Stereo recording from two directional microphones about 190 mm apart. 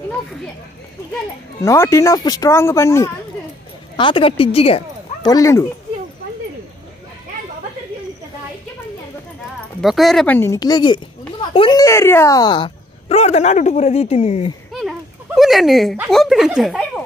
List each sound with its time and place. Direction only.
1.6 s speech: 15° left (ahead or behind)
3.9 s speech: 25° left (ahead or behind)
9.8 s speech: centre (ahead or behind); by 11.0 s 20° left (ahead or behind)
11.5 s a sound: 25° left (ahead or behind)
11.8 s speech: 15° left (ahead or behind); by 14.5 s 35° left (ahead or behind)
14.7 s a sound: centre (ahead or behind)